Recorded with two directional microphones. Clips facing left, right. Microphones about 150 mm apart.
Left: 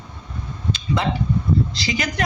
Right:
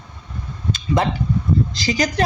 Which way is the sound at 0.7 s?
45° right (ahead or behind).